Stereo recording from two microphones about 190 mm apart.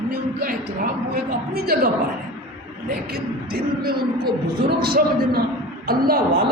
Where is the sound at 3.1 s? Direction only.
55° right (ahead or behind).